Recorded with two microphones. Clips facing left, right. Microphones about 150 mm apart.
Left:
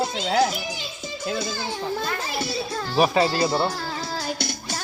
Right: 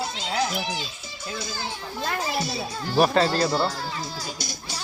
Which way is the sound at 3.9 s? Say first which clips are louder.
Left 4 dB; 65° left (ahead or behind).